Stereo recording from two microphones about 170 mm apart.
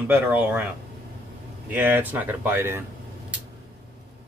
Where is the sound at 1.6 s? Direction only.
10° right (ahead or behind).